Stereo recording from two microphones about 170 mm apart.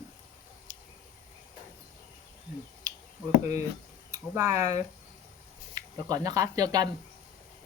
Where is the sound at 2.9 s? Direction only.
20° right (ahead or behind).